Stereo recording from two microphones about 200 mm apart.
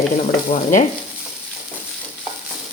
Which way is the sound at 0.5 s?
40° left (ahead or behind).